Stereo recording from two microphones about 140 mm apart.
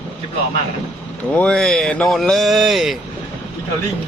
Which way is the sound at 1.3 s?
5° left (ahead or behind).